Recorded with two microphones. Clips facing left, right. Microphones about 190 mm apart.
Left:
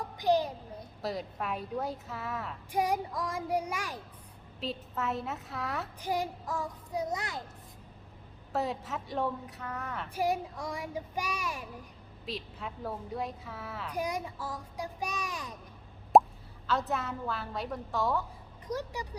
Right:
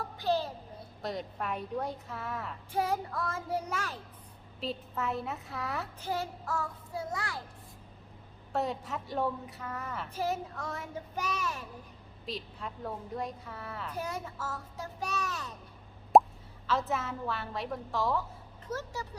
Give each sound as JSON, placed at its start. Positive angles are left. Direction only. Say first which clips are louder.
{"t": 0.2, "sound": "a sound", "louder": "left 4 dB", "side_deg": 15}
{"t": 1.0, "sound": "a woman's voice", "louder": "left 1 dB", "side_deg": 0}
{"t": 2.7, "sound": "a child's voice", "louder": "left 1 dB", "side_deg": 15}
{"t": 4.6, "sound": "a woman's voice", "louder": "even", "side_deg": 0}
{"t": 6.0, "sound": "a child's voice", "louder": "left 5 dB", "side_deg": 15}
{"t": 8.5, "sound": "a woman's voice", "louder": "even", "side_deg": 0}
{"t": 10.2, "sound": "a child's voice", "louder": "left 3 dB", "side_deg": 15}
{"t": 12.2, "sound": "a woman's voice", "louder": "even", "side_deg": 0}
{"t": 13.9, "sound": "a child's voice", "louder": "left 5 dB", "side_deg": 15}
{"t": 16.1, "sound": "plop", "louder": "even", "side_deg": 0}
{"t": 16.6, "sound": "a woman's voice", "louder": "even", "side_deg": 0}
{"t": 18.7, "sound": "a child's voice", "louder": "left 2 dB", "side_deg": 15}